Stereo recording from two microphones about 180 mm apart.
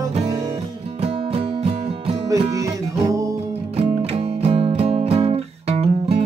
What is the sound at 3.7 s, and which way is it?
Music, 35° right (ahead or behind).